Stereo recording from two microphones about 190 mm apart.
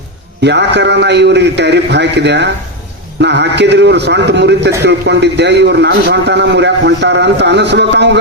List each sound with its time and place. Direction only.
0.4 s a man's voice: 65° right (ahead or behind)